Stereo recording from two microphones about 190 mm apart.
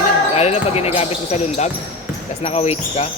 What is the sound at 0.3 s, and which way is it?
Speech, 35° left (ahead or behind).